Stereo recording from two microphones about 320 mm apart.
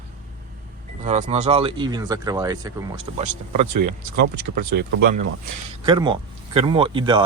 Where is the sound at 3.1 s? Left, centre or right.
Right.